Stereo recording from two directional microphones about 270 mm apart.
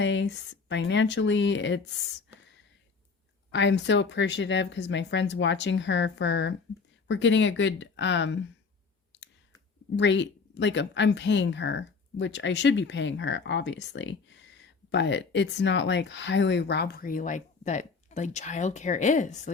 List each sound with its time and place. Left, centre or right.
0.0 s speech: left
3.5 s speech: left
9.9 s speech: left